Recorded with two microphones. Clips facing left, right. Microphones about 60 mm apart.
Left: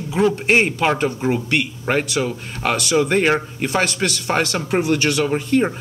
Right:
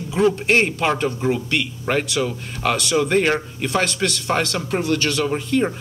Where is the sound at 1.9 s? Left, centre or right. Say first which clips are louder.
Left 1 dB; left.